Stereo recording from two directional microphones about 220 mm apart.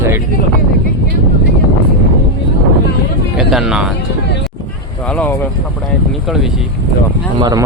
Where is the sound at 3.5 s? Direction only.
5° right (ahead or behind).